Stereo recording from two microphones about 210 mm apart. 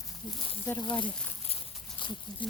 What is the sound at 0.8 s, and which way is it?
Speech, 25° left (ahead or behind).